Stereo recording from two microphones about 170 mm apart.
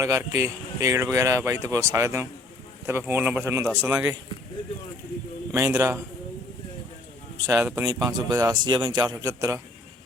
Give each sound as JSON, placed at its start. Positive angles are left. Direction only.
{"t": 0.0, "sound": "a man's voice", "side_deg": -20}
{"t": 5.5, "sound": "a man's voice", "side_deg": -20}
{"t": 7.3, "sound": "a man's voice", "side_deg": -15}